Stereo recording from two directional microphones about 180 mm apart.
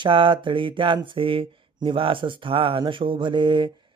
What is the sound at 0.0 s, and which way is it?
Speech, 30° right (ahead or behind).